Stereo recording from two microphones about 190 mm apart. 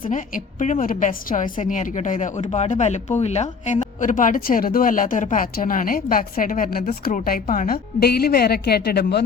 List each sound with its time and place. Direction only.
0.1 s a woman's voice: 40° left (ahead or behind); by 9.2 s 60° left (ahead or behind)